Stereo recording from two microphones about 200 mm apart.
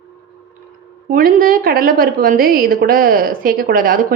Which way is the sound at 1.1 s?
45° right (ahead or behind).